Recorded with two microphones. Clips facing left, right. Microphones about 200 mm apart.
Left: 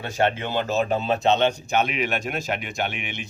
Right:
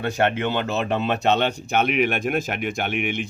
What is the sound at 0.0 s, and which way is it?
Speech, 60° right (ahead or behind).